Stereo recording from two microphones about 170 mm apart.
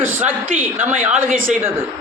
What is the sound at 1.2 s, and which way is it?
Speech, 50° right (ahead or behind).